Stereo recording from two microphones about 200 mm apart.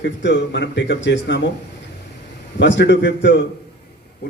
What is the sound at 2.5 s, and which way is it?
Speech, 65° left (ahead or behind).